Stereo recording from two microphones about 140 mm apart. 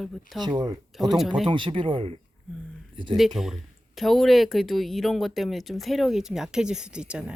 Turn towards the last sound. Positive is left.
turn(degrees=-5)  # may be behind; listen again after turning